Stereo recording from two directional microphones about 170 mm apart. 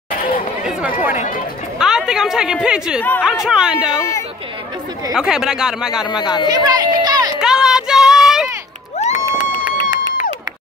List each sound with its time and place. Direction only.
1.1 s speech: 45° left (ahead or behind)
1.8 s a woman's voice: 5° right (ahead or behind)
3.0 s speech: 10° left (ahead or behind)
3.3 s a woman's voice: 5° right (ahead or behind)
5.1 s a woman's voice: 5° right (ahead or behind)
6.4 s speech: 25° right (ahead or behind)
7.3 s a sound: 5° right (ahead or behind)
9.1 s a sound: 25° right (ahead or behind)